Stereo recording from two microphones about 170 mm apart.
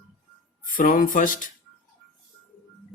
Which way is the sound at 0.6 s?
55° left (ahead or behind).